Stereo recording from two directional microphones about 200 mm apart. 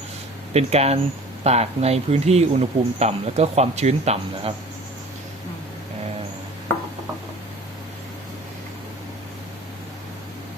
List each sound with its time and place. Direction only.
0.5 s speech: 30° right (ahead or behind)